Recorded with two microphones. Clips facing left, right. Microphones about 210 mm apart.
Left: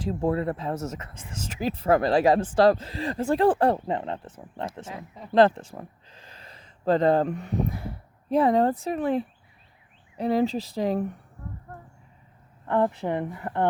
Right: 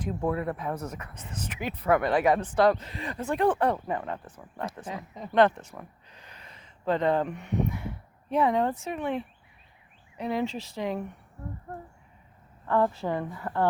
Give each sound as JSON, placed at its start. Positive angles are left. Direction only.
{"t": 0.1, "sound": "speech", "side_deg": 30}
{"t": 11.4, "sound": "speech", "side_deg": -25}
{"t": 12.6, "sound": "speech", "side_deg": 20}